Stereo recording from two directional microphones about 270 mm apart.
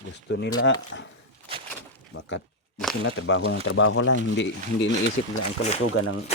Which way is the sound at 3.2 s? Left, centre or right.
Left.